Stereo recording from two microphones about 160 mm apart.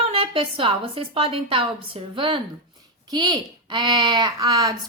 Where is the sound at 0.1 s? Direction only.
35° right (ahead or behind).